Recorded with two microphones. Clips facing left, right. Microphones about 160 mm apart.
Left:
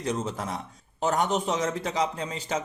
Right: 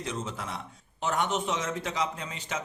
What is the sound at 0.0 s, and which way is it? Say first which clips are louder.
A man's voice: left 5 dB; 40° left (ahead or behind).